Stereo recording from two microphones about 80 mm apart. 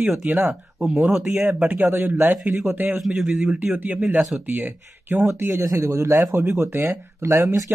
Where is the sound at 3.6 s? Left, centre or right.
Centre.